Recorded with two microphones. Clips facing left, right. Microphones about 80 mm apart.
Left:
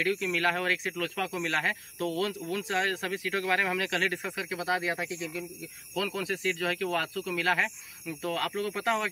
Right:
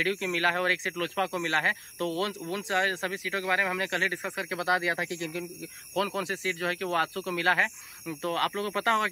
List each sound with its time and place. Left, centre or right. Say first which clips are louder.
0.0 s speech: even; right
4.1 s speech: even; centre
4.4 s speech: right 4 dB; right
5.9 s speech: right 2 dB; right